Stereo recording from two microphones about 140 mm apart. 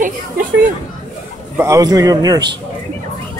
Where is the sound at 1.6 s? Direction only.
25° right (ahead or behind).